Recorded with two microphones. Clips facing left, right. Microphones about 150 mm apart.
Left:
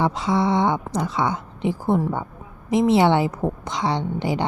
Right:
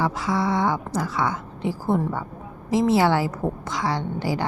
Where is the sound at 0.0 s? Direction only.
25° left (ahead or behind).